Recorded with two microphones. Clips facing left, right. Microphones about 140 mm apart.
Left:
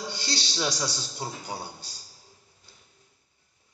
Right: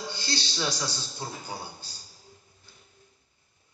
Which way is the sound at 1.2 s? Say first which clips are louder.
Left 3 dB; 25° left (ahead or behind).